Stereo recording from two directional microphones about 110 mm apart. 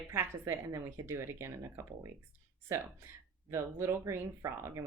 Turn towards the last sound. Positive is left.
turn(degrees=-25)  # may be behind; listen again after turning